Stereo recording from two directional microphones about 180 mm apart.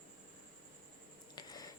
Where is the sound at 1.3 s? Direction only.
20° left (ahead or behind).